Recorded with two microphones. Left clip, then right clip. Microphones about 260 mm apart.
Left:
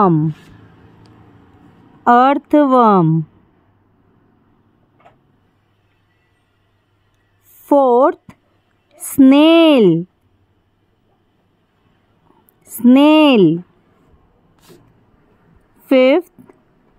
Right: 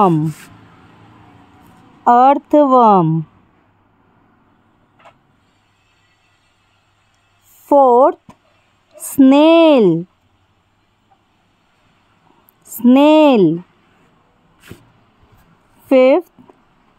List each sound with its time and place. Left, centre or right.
0.0 s speech: centre
2.0 s speech: centre
7.6 s speech: centre
12.6 s speech: centre
15.9 s a sound: centre